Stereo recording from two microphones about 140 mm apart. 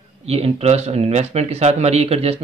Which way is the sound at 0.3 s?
45° right (ahead or behind).